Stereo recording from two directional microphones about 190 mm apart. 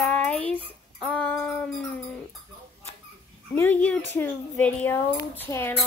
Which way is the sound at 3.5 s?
10° left (ahead or behind).